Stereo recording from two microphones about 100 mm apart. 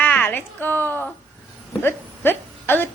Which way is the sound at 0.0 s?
20° left (ahead or behind).